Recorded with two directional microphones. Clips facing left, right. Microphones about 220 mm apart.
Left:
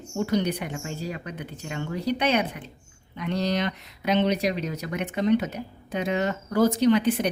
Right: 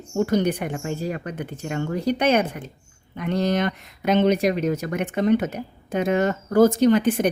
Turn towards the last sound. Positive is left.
turn(degrees=-45)  # may be behind; listen again after turning